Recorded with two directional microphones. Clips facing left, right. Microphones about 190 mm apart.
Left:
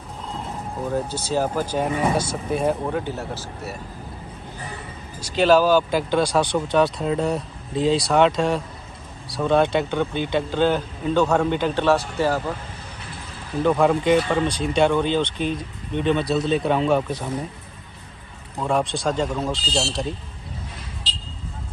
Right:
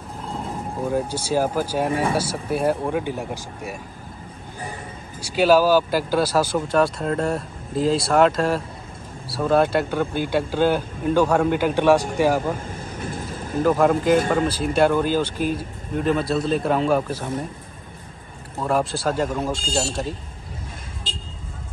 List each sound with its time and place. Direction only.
0.8 s speech: 10° right (ahead or behind)
5.2 s speech: 10° right (ahead or behind)
13.0 s vehicle: 45° right (ahead or behind)
13.6 s speech: 5° right (ahead or behind)
18.6 s speech: centre (ahead or behind)
19.6 s speech: 50° right (ahead or behind)
21.0 s vehicle: 50° right (ahead or behind)